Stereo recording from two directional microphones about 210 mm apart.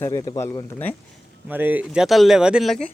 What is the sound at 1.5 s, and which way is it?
Speech, 10° right (ahead or behind).